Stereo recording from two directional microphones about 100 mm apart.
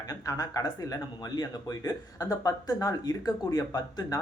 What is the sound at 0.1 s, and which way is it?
Speech, 35° left (ahead or behind).